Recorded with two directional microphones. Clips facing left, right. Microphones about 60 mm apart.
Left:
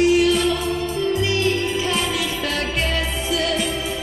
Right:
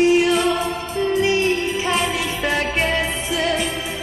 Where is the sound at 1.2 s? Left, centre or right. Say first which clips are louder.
Right 2 dB; right.